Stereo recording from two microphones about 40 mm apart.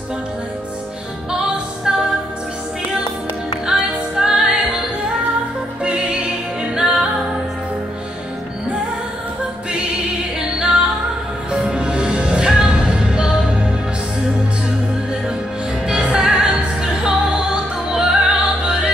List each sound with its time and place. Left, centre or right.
1.9 s music: centre
4.2 s music: centre
5.9 s music: right
10.4 s music: centre
15.9 s music: right